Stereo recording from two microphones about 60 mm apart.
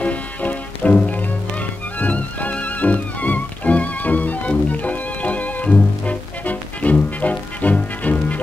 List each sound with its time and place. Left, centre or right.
0.0 s music: left